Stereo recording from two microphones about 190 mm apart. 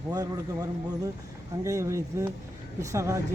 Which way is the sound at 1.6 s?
15° right (ahead or behind).